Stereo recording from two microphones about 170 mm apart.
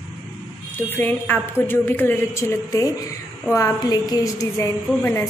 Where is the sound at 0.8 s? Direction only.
10° left (ahead or behind).